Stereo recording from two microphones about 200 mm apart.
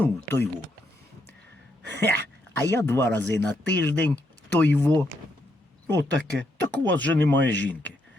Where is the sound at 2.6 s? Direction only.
10° left (ahead or behind).